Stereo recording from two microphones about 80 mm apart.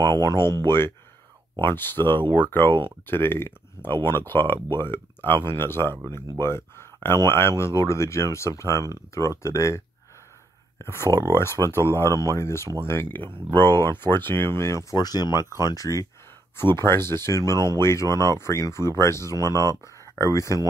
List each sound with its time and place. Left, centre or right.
0.0 s speech: left
10.8 s speech: left
15.0 s speech: left
15.6 s speech: left
16.5 s speech: left